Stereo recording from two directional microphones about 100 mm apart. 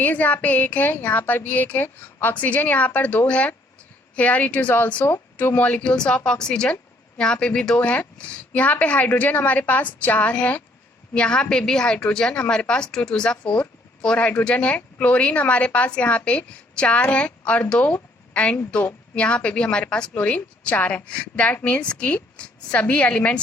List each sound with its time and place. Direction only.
0.0 s a woman's voice: 15° left (ahead or behind)